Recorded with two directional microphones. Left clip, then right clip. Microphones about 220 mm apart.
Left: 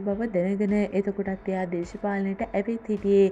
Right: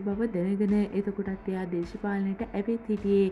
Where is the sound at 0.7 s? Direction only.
35° right (ahead or behind).